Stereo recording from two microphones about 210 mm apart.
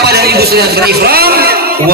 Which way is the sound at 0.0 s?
50° right (ahead or behind).